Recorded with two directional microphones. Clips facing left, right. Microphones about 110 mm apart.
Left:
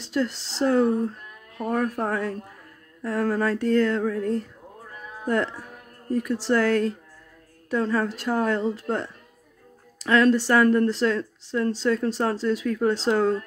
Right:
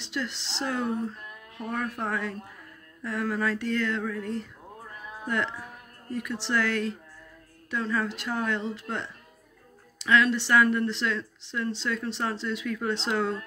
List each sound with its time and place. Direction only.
0.0 s speech: 40° left (ahead or behind)